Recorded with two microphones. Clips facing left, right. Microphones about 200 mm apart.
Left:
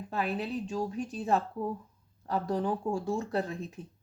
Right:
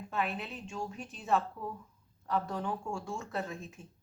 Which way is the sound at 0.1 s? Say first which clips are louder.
Left 4 dB; 35° left (ahead or behind).